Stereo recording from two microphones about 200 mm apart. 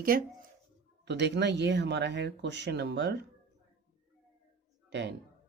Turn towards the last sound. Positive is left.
turn(degrees=-60)  # may be behind; listen again after turning